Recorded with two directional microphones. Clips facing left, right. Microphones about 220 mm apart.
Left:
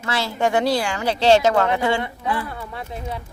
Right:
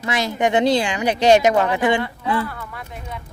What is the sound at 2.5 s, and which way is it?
Speech, 25° left (ahead or behind).